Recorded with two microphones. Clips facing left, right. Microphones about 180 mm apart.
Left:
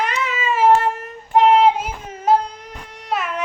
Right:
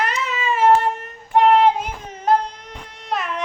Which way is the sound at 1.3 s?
Centre (ahead or behind).